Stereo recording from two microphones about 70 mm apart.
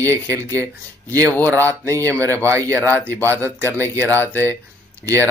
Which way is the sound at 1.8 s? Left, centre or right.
Right.